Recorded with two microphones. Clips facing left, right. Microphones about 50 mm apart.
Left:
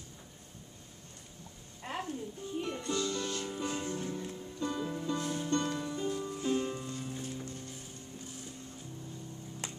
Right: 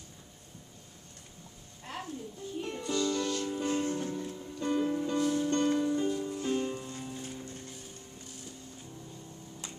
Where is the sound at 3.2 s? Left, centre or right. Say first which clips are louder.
Right 4 dB; centre.